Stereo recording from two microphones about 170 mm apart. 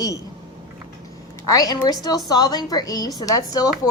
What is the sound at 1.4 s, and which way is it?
Speech, 20° left (ahead or behind).